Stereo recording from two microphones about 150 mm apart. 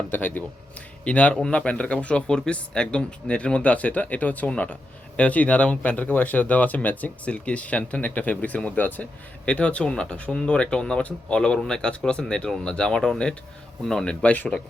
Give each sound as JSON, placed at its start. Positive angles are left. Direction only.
{"t": 0.1, "sound": "speech", "side_deg": 10}